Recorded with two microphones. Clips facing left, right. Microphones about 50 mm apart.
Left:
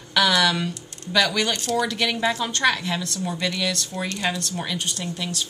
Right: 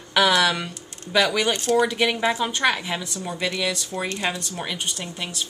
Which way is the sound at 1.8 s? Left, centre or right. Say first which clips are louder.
Right 2 dB; centre.